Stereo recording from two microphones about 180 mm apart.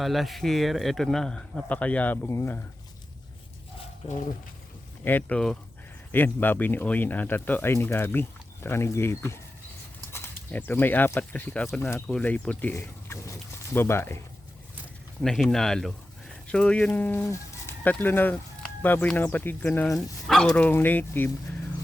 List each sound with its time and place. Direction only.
0.0 s speech: centre (ahead or behind)
5.0 s speech: 10° left (ahead or behind)
15.2 s speech: 5° left (ahead or behind)
20.2 s bow-wow: centre (ahead or behind)
20.6 s speech: 10° left (ahead or behind)